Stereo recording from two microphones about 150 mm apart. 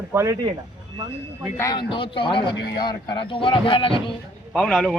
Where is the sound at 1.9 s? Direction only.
35° left (ahead or behind).